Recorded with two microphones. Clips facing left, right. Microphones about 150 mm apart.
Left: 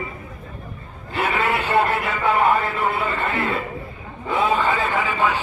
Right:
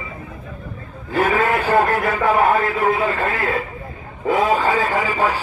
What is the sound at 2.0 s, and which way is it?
Speech, 45° right (ahead or behind).